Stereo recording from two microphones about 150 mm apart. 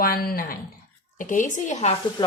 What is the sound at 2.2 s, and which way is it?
Stir, 30° left (ahead or behind).